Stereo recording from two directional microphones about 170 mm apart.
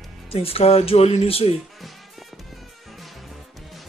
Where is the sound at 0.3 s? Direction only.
35° left (ahead or behind).